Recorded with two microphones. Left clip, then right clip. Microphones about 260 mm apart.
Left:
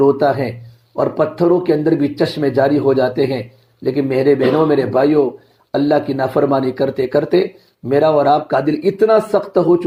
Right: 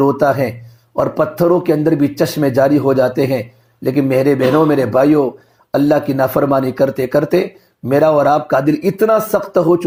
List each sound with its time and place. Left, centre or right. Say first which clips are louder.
0.0 s speech: even; right